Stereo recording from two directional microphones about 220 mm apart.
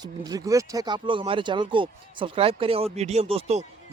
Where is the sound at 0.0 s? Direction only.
15° right (ahead or behind).